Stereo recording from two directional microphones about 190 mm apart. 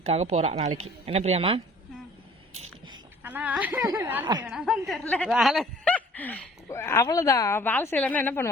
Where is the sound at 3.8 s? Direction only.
20° right (ahead or behind).